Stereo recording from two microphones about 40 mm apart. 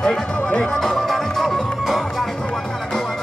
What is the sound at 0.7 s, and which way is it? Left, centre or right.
Music, centre.